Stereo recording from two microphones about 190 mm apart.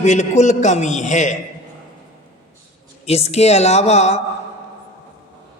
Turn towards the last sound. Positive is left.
turn(degrees=35)  # may be behind; listen again after turning